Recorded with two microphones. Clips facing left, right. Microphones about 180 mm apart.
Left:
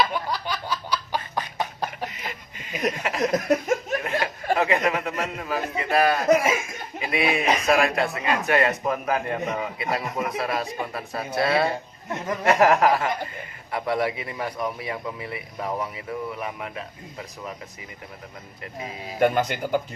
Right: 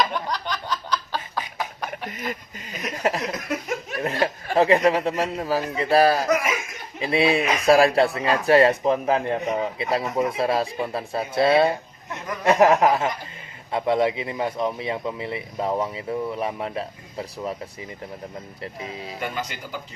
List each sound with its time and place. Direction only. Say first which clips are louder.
0.0 s a sound: even; 5° left (ahead or behind)
1.5 s beatboxing: left 2 dB; 30° left (ahead or behind)
2.0 s speech: right 6 dB; 45° right (ahead or behind)
3.3 s laughter: left 6 dB; 45° left (ahead or behind)
4.0 s a man's voice: right 2 dB; 35° right (ahead or behind)
6.2 s speech: left 3 dB; 30° left (ahead or behind)
7.0 s a man's voice: right 3 dB; 30° right (ahead or behind)
19.2 s speech: left 11 dB; 55° left (ahead or behind)